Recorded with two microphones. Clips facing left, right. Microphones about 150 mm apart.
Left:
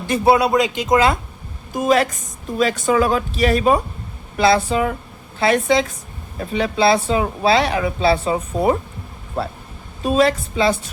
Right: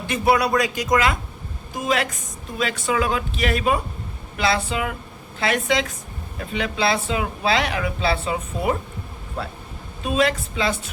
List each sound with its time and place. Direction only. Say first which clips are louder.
0.1 s speech: left 4 dB; 25° left (ahead or behind)
1.7 s a woman's voice: left 7 dB; 45° left (ahead or behind)
10.0 s speech: left 5 dB; 35° left (ahead or behind)